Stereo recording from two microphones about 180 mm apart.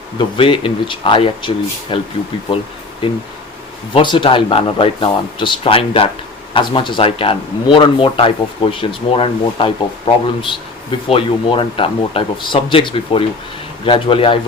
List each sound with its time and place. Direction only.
0.2 s speech: 30° left (ahead or behind)
3.9 s speech: 25° left (ahead or behind)